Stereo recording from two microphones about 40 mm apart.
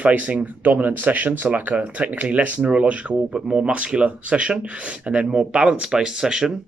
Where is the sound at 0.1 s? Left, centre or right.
Right.